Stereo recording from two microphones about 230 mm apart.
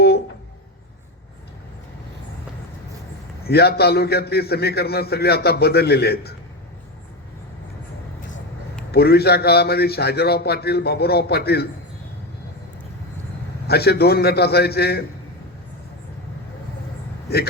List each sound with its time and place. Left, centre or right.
3.4 s a man's voice: left
8.9 s a man's voice: left
13.7 s a man's voice: left
17.2 s speech: left